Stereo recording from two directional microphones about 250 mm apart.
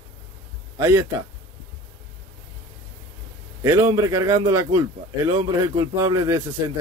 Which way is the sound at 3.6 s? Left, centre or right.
Centre.